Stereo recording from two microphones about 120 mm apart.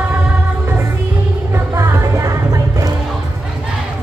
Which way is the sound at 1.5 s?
25° right (ahead or behind).